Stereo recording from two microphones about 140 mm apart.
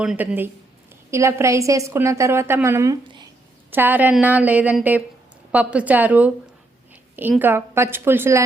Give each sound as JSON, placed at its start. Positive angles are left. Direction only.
{"t": 0.0, "sound": "a woman's voice", "side_deg": -5}